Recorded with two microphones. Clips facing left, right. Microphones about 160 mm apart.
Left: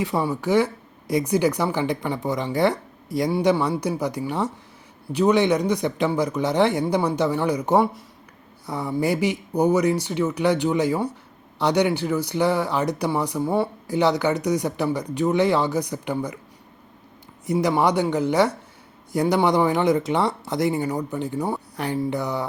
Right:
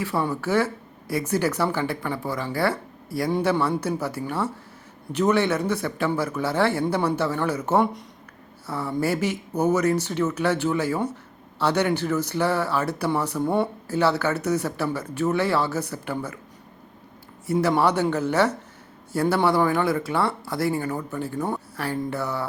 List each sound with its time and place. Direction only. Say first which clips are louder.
0.0 s speech: left 2 dB; 15° left (ahead or behind)
13.9 s speech: left 2 dB; 15° left (ahead or behind)
17.4 s speech: left 1 dB; 15° left (ahead or behind)